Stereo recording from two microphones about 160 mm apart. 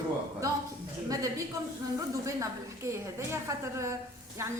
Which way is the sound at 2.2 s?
20° right (ahead or behind).